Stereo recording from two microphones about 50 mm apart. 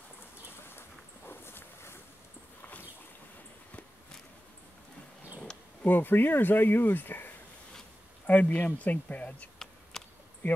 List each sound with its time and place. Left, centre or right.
0.7 s boat: left
5.9 s speech: left
9.9 s a sound: centre